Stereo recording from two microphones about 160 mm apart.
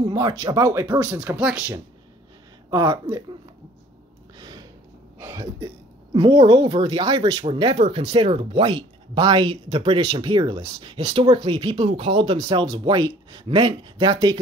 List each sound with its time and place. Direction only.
0.1 s speech: 25° right (ahead or behind); by 1.6 s 5° right (ahead or behind)
2.7 s speech: 20° right (ahead or behind)
4.4 s a sound: 25° right (ahead or behind)
5.2 s speech: 20° right (ahead or behind)